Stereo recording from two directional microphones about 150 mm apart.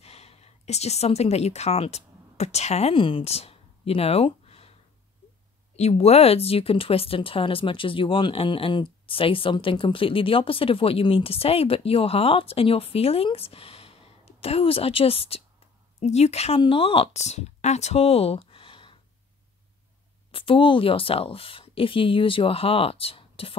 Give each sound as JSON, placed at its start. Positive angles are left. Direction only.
{"t": 0.0, "sound": "a woman's voice", "side_deg": 45}
{"t": 5.8, "sound": "speech", "side_deg": 45}
{"t": 20.2, "sound": "speech", "side_deg": 35}